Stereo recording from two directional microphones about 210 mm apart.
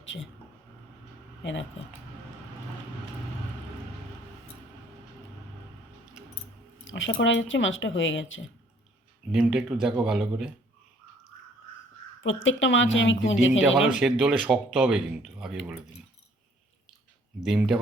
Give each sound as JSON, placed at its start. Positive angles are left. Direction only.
{"t": 0.0, "sound": "speech", "side_deg": 60}
{"t": 6.9, "sound": "speech", "side_deg": 60}
{"t": 9.3, "sound": "speech", "side_deg": -5}
{"t": 12.2, "sound": "speech", "side_deg": 65}
{"t": 13.6, "sound": "speech", "side_deg": -5}
{"t": 17.4, "sound": "speech", "side_deg": 0}